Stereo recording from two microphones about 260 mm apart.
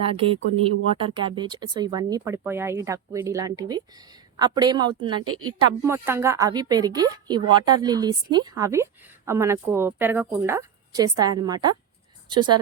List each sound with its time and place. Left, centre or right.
0.0 s a woman's voice: right
5.2 s a woman's voice: right
5.5 s a woman's voice: centre